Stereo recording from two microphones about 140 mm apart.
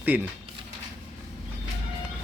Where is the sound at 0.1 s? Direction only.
10° right (ahead or behind).